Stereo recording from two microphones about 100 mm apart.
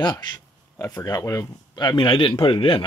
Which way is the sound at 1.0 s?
35° left (ahead or behind).